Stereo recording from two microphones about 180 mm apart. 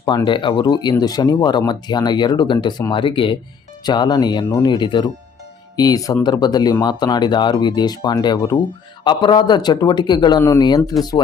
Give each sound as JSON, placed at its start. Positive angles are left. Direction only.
{"t": 0.0, "sound": "speech", "side_deg": 25}